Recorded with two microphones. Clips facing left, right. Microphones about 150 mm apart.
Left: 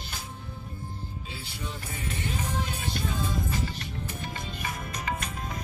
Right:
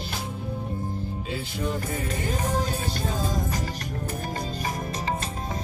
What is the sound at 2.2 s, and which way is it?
Music, 40° right (ahead or behind).